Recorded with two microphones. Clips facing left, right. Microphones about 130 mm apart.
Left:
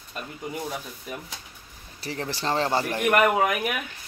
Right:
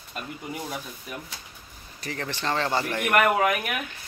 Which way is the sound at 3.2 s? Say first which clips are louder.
Left 1 dB; 5° left (ahead or behind).